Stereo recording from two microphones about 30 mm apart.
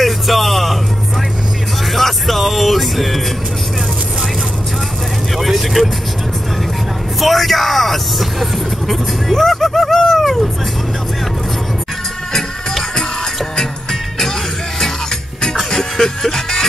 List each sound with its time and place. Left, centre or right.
0.0 s music: centre
2.0 s music: centre
5.4 s vehicle: centre
7.2 s vehicle: centre
12.3 s music: centre
15.5 s music: centre